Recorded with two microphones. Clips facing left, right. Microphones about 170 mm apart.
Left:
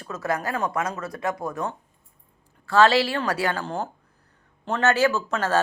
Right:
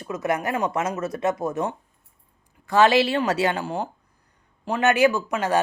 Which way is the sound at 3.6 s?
10° right (ahead or behind).